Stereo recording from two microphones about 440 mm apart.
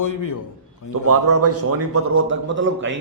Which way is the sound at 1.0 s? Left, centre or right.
Right.